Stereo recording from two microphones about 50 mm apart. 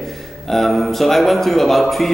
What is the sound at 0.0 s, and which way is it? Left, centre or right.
Speech, centre.